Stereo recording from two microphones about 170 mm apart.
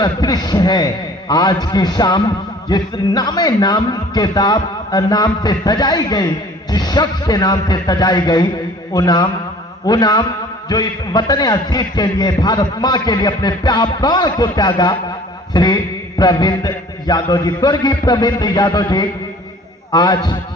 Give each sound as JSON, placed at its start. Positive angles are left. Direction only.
{"t": 0.0, "sound": "a man's voice", "side_deg": 25}